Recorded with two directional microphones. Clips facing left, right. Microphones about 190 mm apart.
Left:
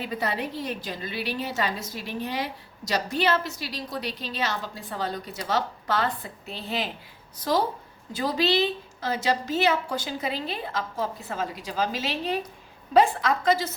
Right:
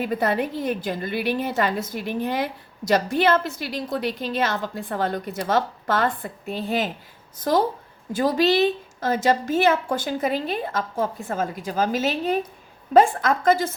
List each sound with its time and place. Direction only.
0.0 s a woman's voice: 50° right (ahead or behind)